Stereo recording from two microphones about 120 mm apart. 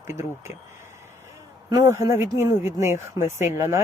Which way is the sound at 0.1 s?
20° right (ahead or behind).